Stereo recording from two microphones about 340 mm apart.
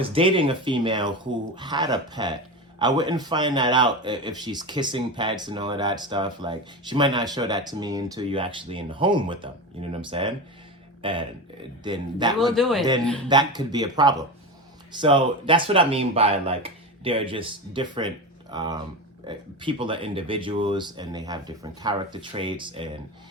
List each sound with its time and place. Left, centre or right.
0.0 s a man's voice: centre
12.5 s speech: centre
13.2 s a man's voice: centre